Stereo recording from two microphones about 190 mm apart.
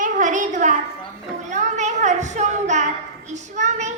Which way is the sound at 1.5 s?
40° right (ahead or behind).